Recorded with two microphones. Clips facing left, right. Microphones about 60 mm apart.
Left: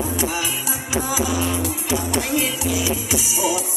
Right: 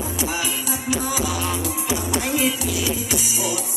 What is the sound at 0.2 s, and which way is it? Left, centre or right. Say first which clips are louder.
Music: right 1 dB; centre.